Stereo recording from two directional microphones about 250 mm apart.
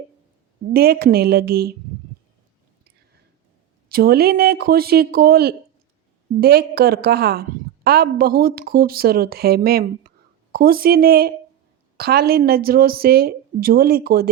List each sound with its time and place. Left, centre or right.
0.7 s a woman's voice: right
3.8 s a woman's voice: right